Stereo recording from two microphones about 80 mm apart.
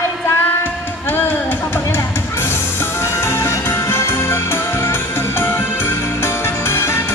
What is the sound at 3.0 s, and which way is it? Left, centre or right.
Music, left.